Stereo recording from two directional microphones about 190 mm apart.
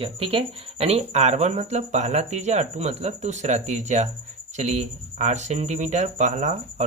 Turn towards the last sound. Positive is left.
turn(degrees=-35)  # may be behind; listen again after turning